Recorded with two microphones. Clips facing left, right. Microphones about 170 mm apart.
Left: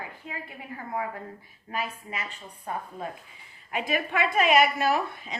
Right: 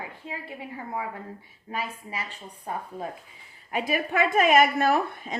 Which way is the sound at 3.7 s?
40° right (ahead or behind).